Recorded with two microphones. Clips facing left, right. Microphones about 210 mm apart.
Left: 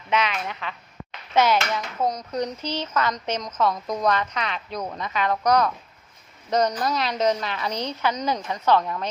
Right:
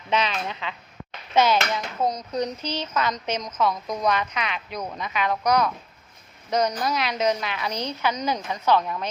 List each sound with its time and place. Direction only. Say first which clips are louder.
0.1 s a child's voice: even; 30° right (ahead or behind); by 7.7 s 10° right (ahead or behind)
7.7 s a woman's voice: left 1 dB; 20° left (ahead or behind)
8.0 s a woman's voice: even; 10° right (ahead or behind)